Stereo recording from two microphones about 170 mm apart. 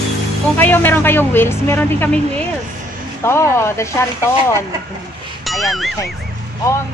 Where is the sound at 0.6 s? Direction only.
10° left (ahead or behind).